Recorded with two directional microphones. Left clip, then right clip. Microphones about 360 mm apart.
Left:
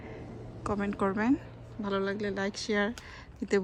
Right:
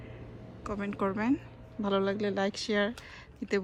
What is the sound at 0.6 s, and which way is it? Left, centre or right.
Speech, centre.